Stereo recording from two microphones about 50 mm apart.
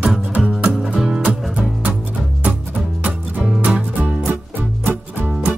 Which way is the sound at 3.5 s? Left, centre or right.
Right.